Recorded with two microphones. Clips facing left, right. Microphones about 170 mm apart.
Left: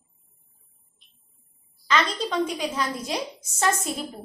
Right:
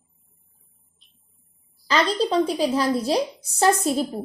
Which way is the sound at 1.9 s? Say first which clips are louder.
Right 4 dB; 35° right (ahead or behind).